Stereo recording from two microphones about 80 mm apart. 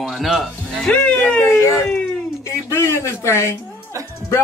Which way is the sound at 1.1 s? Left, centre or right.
Left.